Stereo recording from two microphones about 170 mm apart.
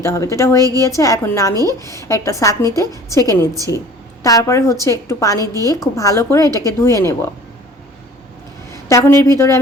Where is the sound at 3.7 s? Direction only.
90° left.